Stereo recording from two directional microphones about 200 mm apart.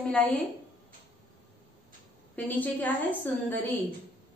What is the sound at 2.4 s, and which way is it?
A woman's voice, 10° left (ahead or behind).